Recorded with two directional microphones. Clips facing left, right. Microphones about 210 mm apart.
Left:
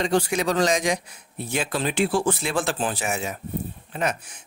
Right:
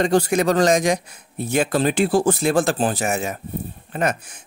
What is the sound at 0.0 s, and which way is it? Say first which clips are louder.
Speech: right 5 dB; 45° right (ahead or behind).